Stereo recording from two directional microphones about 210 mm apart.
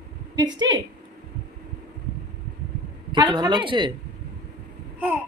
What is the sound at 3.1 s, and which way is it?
Speech, 20° right (ahead or behind).